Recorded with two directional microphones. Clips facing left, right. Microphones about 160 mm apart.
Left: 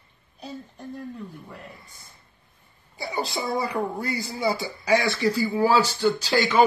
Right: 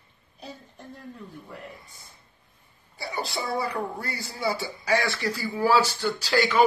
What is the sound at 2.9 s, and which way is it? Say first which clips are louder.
Speech: left 3 dB; 20° left (ahead or behind).